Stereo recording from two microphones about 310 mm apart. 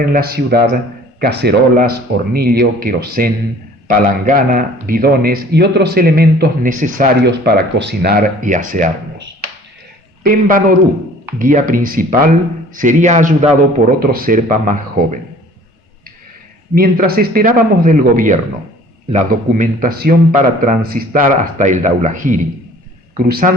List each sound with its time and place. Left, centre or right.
0.0 s a man's voice: right
16.7 s a man's voice: right